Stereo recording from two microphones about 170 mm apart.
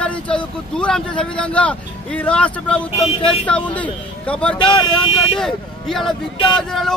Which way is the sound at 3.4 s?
10° left (ahead or behind).